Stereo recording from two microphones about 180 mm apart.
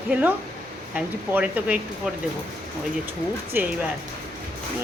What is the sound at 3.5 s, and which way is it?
Speech, 10° right (ahead or behind).